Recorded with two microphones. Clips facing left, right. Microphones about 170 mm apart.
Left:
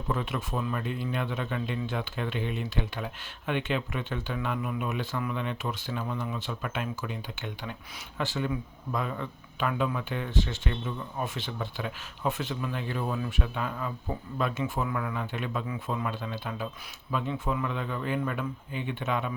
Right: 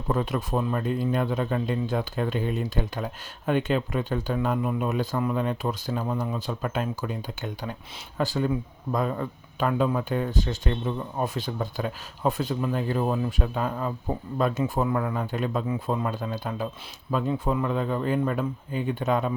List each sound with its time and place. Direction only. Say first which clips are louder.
0.1 s speech: right 6 dB; 40° right (ahead or behind)